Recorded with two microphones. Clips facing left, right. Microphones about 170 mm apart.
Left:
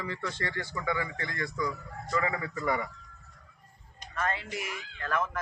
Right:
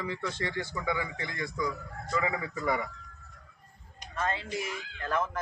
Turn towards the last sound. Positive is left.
turn(degrees=-25)  # may be behind; listen again after turning